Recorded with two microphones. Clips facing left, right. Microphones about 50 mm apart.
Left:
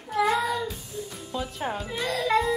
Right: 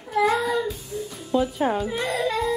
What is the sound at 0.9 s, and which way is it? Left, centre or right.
Music, right.